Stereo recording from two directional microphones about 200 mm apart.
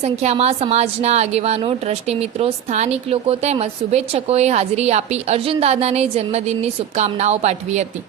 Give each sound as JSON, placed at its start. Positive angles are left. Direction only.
{"t": 0.0, "sound": "a woman's voice", "side_deg": -30}